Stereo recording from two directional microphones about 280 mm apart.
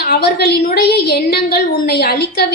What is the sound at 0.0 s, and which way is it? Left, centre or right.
A woman's voice, left.